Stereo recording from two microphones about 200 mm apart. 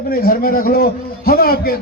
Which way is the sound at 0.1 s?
50° left (ahead or behind).